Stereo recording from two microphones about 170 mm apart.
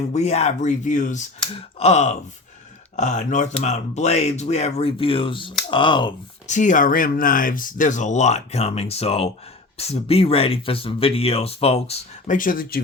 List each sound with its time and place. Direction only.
0.1 s speech: 40° left (ahead or behind)
6.5 s speech: 45° left (ahead or behind)
12.4 s speech: 55° left (ahead or behind)